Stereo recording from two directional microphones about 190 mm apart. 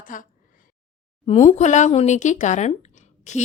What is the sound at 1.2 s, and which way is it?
Speech, 35° left (ahead or behind).